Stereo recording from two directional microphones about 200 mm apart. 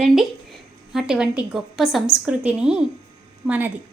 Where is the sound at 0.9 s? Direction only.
5° right (ahead or behind).